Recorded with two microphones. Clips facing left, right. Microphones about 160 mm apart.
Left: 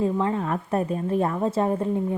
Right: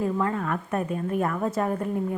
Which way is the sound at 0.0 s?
25° left (ahead or behind).